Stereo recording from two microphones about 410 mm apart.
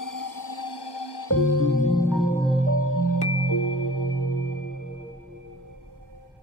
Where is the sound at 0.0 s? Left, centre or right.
Left.